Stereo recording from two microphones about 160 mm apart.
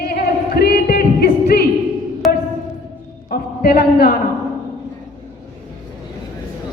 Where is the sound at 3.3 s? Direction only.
75° left (ahead or behind).